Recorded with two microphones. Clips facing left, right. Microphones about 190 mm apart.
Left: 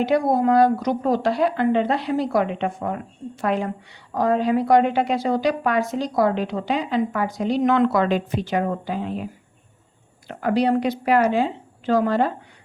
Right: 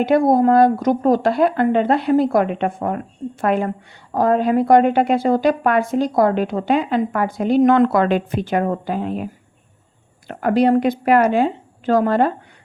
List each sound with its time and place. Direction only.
0.0 s a woman's voice: 50° right (ahead or behind)